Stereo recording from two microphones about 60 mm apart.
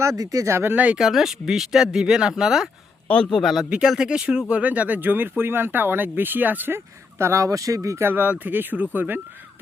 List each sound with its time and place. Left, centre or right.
0.0 s speech: right
0.5 s speech: right
0.9 s speech: centre
3.2 s speech: centre; by 6.7 s right
6.7 s speech: right
8.0 s speech: right